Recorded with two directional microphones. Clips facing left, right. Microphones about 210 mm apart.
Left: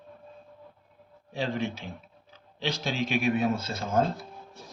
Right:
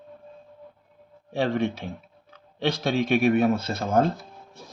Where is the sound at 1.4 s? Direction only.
60° right (ahead or behind).